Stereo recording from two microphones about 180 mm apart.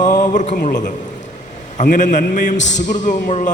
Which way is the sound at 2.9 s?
45° left (ahead or behind).